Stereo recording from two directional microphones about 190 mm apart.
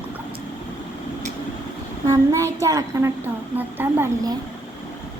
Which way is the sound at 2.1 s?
15° right (ahead or behind).